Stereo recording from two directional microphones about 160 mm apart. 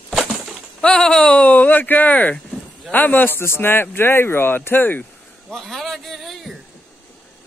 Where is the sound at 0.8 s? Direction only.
5° left (ahead or behind).